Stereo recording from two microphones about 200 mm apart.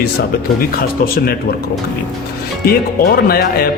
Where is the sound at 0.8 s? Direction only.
50° left (ahead or behind).